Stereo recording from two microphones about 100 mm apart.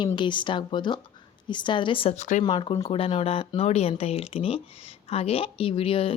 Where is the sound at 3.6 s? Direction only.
85° left; by 6.1 s 65° left (ahead or behind).